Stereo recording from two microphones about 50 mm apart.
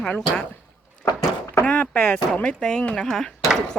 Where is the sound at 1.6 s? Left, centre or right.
Left.